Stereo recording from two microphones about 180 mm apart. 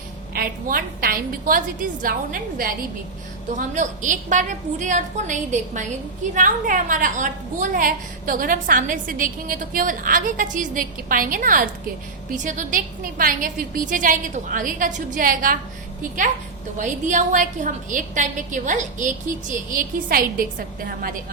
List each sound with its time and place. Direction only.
0.3 s a woman's voice: 55° right (ahead or behind)
16.7 s a woman's voice: 45° right (ahead or behind)